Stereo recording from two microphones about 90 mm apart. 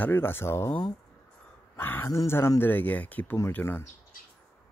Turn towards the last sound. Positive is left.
turn(degrees=25)  # may be behind; listen again after turning